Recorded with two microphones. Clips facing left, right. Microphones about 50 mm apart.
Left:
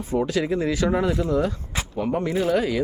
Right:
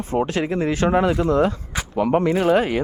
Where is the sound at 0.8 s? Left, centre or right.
Right.